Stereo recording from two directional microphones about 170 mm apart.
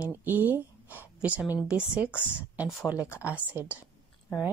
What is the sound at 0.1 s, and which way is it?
Speech, 10° right (ahead or behind).